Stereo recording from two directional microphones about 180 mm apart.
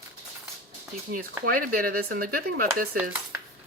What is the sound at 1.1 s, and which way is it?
Speech, 50° right (ahead or behind).